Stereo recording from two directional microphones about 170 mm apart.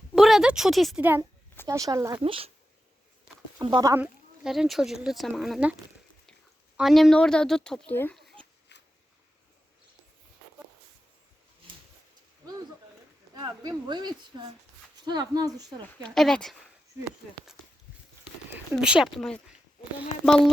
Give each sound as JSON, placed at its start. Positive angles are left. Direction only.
{"t": 0.2, "sound": "speech", "side_deg": 0}
{"t": 1.6, "sound": "speech", "side_deg": -20}
{"t": 2.2, "sound": "speech", "side_deg": -35}
{"t": 3.6, "sound": "speech", "side_deg": -25}
{"t": 3.9, "sound": "speech", "side_deg": -5}
{"t": 6.7, "sound": "speech", "side_deg": 0}
{"t": 8.1, "sound": "a sound", "side_deg": 0}
{"t": 8.7, "sound": "a sound", "side_deg": 90}
{"t": 13.3, "sound": "speech", "side_deg": -25}
{"t": 16.0, "sound": "speech", "side_deg": 0}
{"t": 18.7, "sound": "speech", "side_deg": -5}